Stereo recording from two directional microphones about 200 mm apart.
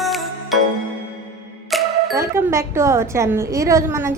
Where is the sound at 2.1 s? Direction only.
15° right (ahead or behind).